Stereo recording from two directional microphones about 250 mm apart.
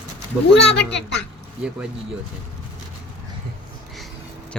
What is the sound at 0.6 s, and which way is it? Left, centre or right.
Speech, left.